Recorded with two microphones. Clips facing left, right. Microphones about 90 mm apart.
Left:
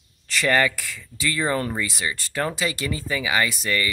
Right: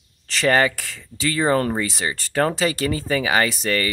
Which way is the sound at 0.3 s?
25° right (ahead or behind).